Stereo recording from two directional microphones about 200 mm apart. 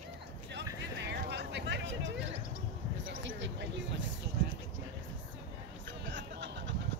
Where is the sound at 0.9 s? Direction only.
60° right (ahead or behind).